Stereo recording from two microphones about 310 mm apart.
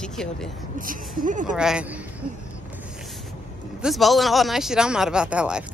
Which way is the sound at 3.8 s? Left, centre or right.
Centre.